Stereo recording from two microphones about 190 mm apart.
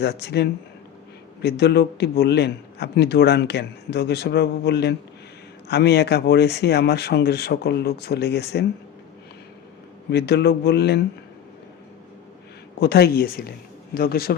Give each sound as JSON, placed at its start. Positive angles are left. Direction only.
{"t": 0.0, "sound": "a man's voice", "side_deg": 60}
{"t": 10.1, "sound": "a man's voice", "side_deg": 60}
{"t": 12.8, "sound": "a man's voice", "side_deg": 60}